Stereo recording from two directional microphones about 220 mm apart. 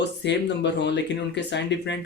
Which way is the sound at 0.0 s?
50° left (ahead or behind).